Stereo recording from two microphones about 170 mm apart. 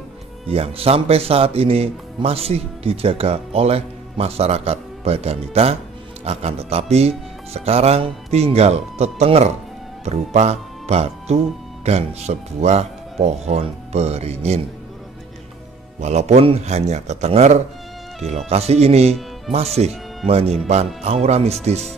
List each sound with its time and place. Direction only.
0.5 s speech: 35° right (ahead or behind)
16.0 s speech: 40° right (ahead or behind)